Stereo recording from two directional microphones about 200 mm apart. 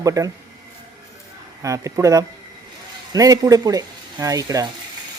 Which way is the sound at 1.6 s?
15° right (ahead or behind).